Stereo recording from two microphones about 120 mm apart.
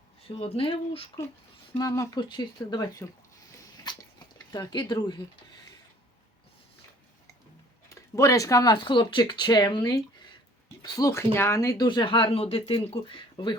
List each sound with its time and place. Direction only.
0.3 s speech: 55° left (ahead or behind)
1.8 s speech: 25° left (ahead or behind)
2.1 s speech: 35° left (ahead or behind)
4.5 s speech: 35° left (ahead or behind)
7.9 s speech: 25° left (ahead or behind)
11.9 s speech: 45° left (ahead or behind)